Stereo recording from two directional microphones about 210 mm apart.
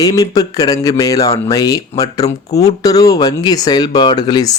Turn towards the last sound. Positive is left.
turn(degrees=20)  # may be behind; listen again after turning